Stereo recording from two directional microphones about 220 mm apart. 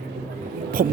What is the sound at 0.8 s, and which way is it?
Speech, 40° right (ahead or behind).